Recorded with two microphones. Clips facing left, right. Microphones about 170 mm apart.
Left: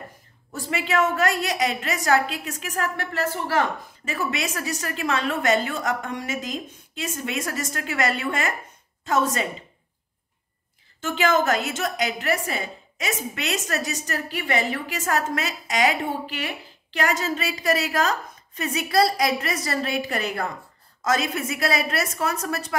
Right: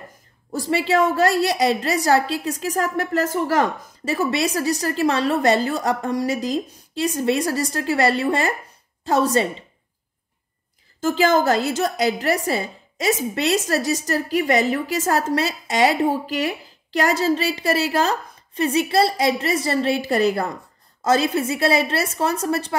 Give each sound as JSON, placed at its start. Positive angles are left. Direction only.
{"t": 0.5, "sound": "a woman's voice", "side_deg": -35}
{"t": 11.0, "sound": "a woman's voice", "side_deg": -35}